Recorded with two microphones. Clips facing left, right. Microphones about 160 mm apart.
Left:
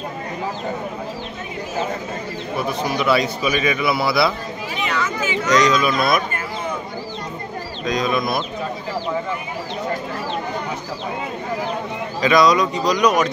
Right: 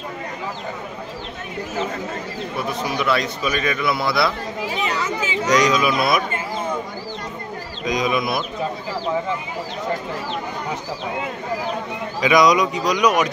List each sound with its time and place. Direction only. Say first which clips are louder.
2.8 s a man's voice: left 3 dB; centre (ahead or behind)
4.8 s chatter: left 4 dB; 35° right (ahead or behind)
5.5 s speech: left 1 dB; 10° right (ahead or behind)
7.8 s speech: even; 10° right (ahead or behind)
12.2 s speech: even; 15° right (ahead or behind)